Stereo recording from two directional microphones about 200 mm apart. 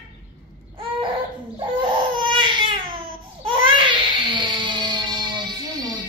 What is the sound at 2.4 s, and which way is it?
Baby cry, 25° right (ahead or behind).